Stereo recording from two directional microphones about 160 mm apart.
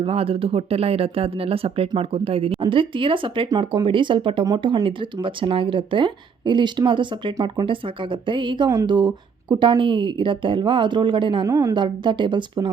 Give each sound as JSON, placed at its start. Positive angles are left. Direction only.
{"t": 0.0, "sound": "speech", "side_deg": -35}
{"t": 11.4, "sound": "a woman's voice", "side_deg": -20}